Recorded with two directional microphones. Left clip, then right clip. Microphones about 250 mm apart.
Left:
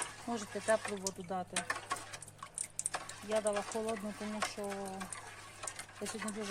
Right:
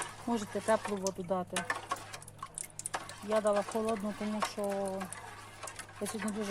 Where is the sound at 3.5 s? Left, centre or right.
Centre.